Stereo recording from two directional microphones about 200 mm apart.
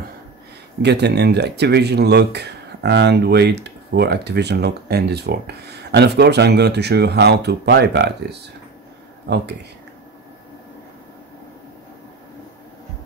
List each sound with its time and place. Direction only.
0.8 s speech: 55° right (ahead or behind)